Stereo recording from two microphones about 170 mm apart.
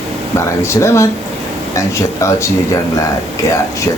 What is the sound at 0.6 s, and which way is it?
Speech, 15° left (ahead or behind).